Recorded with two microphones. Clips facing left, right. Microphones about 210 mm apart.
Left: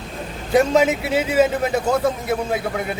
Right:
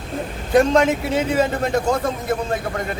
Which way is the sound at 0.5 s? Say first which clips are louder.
Right 1 dB; 5° left (ahead or behind).